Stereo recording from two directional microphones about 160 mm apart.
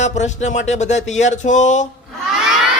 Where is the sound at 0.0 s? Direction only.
45° left (ahead or behind).